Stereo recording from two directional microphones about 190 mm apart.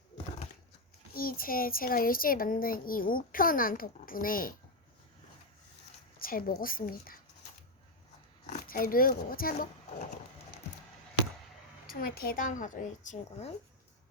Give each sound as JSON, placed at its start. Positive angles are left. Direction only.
{"t": 1.1, "sound": "speech", "side_deg": 50}
{"t": 6.1, "sound": "speech", "side_deg": 50}
{"t": 8.4, "sound": "speech", "side_deg": 45}
{"t": 12.2, "sound": "speech", "side_deg": 45}